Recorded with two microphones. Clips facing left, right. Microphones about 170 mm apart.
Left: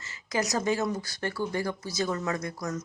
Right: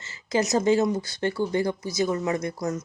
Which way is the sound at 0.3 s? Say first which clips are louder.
Right 6 dB; 25° right (ahead or behind).